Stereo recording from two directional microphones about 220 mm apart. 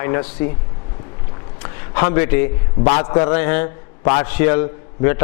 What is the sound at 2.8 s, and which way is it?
A man's voice, 25° left (ahead or behind).